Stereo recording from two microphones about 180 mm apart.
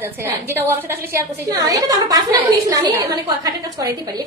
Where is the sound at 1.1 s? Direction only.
20° right (ahead or behind).